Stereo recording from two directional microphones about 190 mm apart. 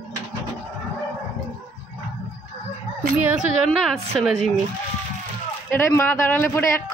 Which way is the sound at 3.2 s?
5° right (ahead or behind).